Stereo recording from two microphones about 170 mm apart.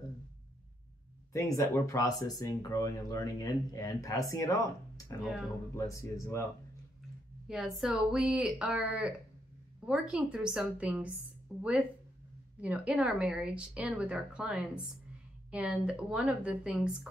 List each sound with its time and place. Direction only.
1.3 s speech: 20° left (ahead or behind)
7.4 s a woman's voice: 5° right (ahead or behind)
12.5 s speech: 10° right (ahead or behind)